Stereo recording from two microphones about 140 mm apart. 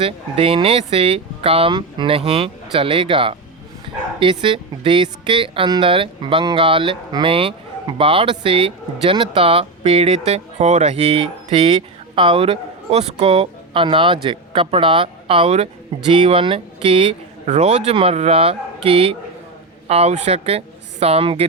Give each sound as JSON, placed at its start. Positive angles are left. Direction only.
{"t": 0.0, "sound": "a woman's voice", "side_deg": -40}